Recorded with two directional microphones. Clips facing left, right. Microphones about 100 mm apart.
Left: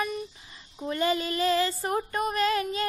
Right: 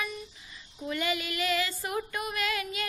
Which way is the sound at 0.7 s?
35° left (ahead or behind).